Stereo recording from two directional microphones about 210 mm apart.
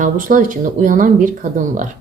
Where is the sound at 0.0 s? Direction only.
40° right (ahead or behind).